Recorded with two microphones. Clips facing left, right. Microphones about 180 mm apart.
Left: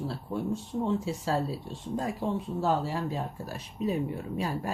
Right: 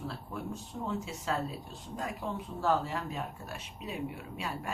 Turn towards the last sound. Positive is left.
turn(degrees=40)  # may be behind; listen again after turning